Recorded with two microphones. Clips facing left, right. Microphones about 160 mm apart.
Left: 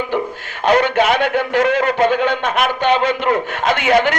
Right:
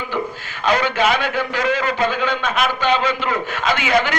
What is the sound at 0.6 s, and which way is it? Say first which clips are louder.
A man's voice: left 4 dB; 60° left (ahead or behind).